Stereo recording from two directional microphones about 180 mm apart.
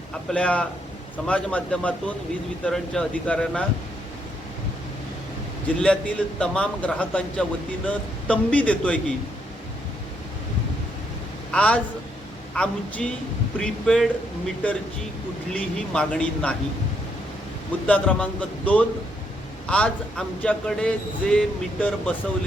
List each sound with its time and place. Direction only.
0.3 s a man's voice: 5° left (ahead or behind)
5.8 s a man's voice: 5° left (ahead or behind)
11.5 s a man's voice: 5° left (ahead or behind)
17.8 s a man's voice: 5° left (ahead or behind)